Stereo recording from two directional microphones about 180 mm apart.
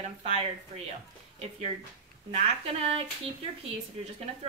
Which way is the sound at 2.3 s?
35° right (ahead or behind).